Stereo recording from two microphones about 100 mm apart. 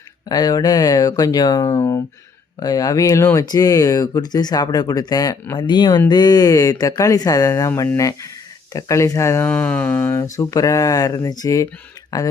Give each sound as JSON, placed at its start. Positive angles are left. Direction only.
{"t": 0.3, "sound": "speech", "side_deg": 40}
{"t": 2.6, "sound": "speech", "side_deg": 40}
{"t": 9.5, "sound": "a sound", "side_deg": 15}
{"t": 10.2, "sound": "speech", "side_deg": 35}